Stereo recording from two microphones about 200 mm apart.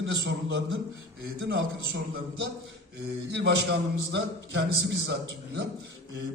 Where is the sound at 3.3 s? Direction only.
60° right (ahead or behind).